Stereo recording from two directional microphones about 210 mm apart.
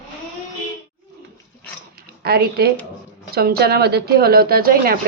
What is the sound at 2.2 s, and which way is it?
Speech, 45° right (ahead or behind).